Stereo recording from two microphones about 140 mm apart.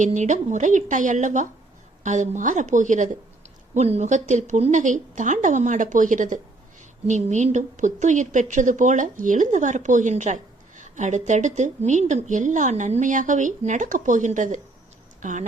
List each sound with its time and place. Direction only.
0.0 s a woman's voice: 60° right (ahead or behind)
3.8 s a woman's voice: 50° right (ahead or behind)